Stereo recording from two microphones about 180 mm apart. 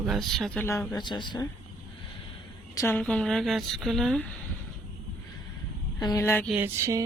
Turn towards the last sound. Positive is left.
turn(degrees=-15)  # may be behind; listen again after turning